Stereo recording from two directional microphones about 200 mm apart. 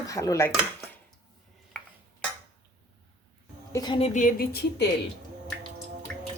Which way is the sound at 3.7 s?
20° left (ahead or behind).